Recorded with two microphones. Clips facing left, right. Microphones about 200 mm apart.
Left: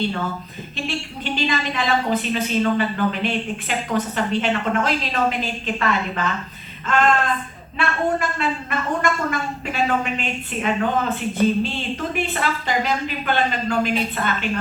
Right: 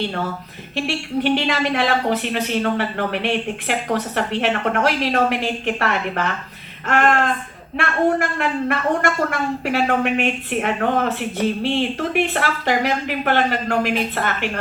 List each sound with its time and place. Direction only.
0.9 s a woman's voice: 70° right (ahead or behind)
6.8 s a sound: 65° right (ahead or behind)
7.8 s a woman's voice: 70° right (ahead or behind)